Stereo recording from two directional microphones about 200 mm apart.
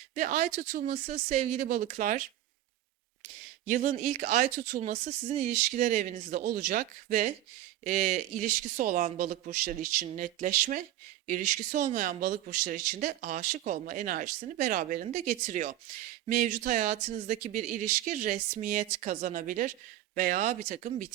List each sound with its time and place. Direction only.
0.1 s speech: 40° right (ahead or behind)
3.7 s speech: 35° right (ahead or behind)